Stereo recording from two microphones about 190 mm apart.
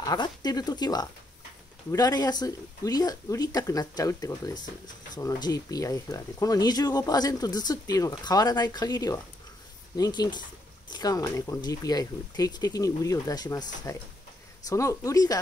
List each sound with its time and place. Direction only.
0.0 s speech: 20° left (ahead or behind)